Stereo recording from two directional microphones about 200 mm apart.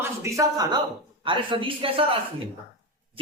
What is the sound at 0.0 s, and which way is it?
A woman's voice, 15° right (ahead or behind).